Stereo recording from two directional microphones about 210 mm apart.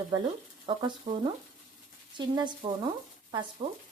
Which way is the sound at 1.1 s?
35° right (ahead or behind).